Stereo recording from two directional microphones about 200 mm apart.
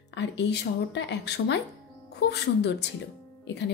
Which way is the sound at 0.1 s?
60° left (ahead or behind).